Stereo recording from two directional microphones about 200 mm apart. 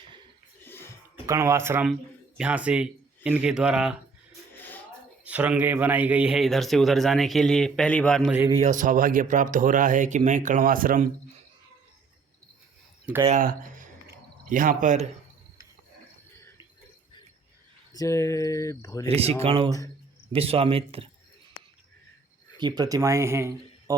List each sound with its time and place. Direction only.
0.6 s a sound: 10° left (ahead or behind)
1.3 s speech: 15° right (ahead or behind)
5.2 s speech: 5° right (ahead or behind)
8.3 s speech: 10° right (ahead or behind)
8.5 s speech: 40° right (ahead or behind)
13.2 s speech: 40° right (ahead or behind)
17.9 s speech: 15° left (ahead or behind)
19.0 s a man's voice: 30° right (ahead or behind)
22.5 s speech: 20° right (ahead or behind)